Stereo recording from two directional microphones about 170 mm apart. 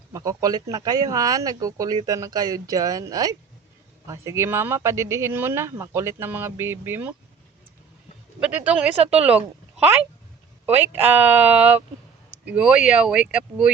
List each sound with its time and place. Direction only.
0.1 s speech: 20° right (ahead or behind)
8.4 s speech: 10° right (ahead or behind)
10.8 s speech: 10° right (ahead or behind)